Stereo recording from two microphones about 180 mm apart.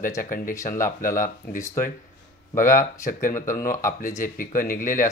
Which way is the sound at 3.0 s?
45° left (ahead or behind).